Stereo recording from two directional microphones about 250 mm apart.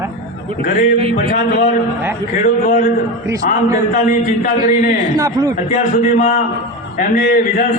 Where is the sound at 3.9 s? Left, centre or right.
Left.